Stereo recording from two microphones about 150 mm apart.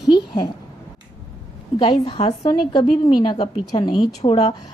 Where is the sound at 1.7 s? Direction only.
35° left (ahead or behind).